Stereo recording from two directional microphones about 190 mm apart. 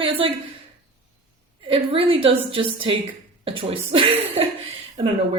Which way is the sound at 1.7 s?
30° right (ahead or behind).